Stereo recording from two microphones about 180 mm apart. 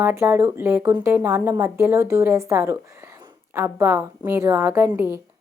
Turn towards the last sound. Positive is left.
turn(degrees=-15)  # may be behind; listen again after turning